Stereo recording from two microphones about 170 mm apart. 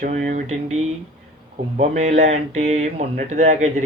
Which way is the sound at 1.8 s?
40° right (ahead or behind).